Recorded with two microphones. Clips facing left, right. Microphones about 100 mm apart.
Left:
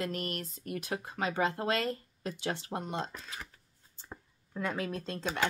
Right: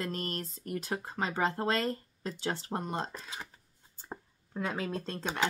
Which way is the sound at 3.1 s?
20° right (ahead or behind).